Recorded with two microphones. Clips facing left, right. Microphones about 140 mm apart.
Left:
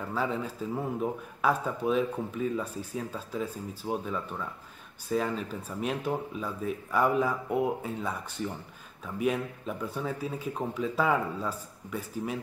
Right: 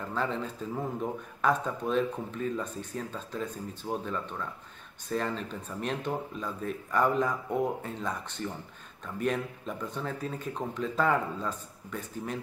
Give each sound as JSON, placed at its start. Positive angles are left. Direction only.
{"t": 0.0, "sound": "speech", "side_deg": 5}